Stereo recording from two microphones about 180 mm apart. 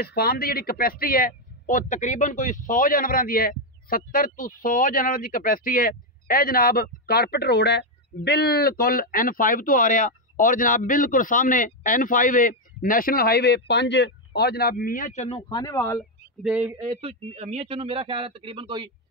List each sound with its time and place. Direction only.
0.0 s speech: 60° left (ahead or behind)
13.7 s a man's voice: 70° left (ahead or behind); by 15.2 s 45° left (ahead or behind)
15.2 s speech: 30° left (ahead or behind)
16.0 s speech: 5° right (ahead or behind)
16.7 s speech: 25° right (ahead or behind)